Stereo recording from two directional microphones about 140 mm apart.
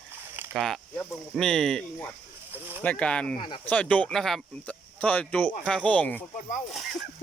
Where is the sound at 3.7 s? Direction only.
10° left (ahead or behind).